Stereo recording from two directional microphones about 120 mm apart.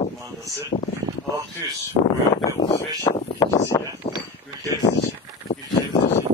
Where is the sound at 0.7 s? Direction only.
90° left.